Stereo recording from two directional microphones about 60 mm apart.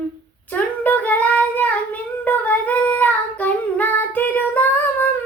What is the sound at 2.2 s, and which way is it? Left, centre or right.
Child singing, left.